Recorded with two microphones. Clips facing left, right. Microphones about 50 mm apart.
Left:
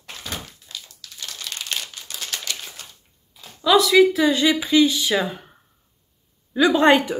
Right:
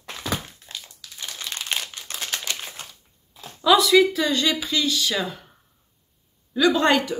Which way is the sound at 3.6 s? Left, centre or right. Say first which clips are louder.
Left 1 dB; centre.